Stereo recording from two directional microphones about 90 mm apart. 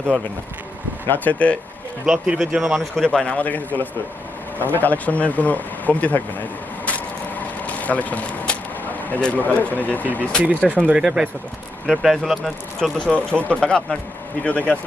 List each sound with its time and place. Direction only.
1.0 s a man's voice: 20° left (ahead or behind)
2.0 s a man's voice: 10° right (ahead or behind); by 6.2 s 15° left (ahead or behind)
6.8 s a sound: 15° left (ahead or behind)
9.2 s a man's voice: 15° left (ahead or behind)
10.9 s speech: 10° right (ahead or behind)
13.0 s a man's voice: 10° left (ahead or behind)